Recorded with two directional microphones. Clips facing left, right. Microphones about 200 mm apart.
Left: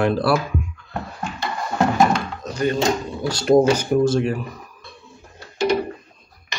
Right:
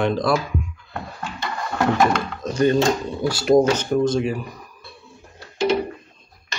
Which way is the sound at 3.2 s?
5° right (ahead or behind).